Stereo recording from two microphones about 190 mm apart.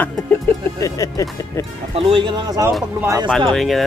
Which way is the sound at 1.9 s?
30° right (ahead or behind).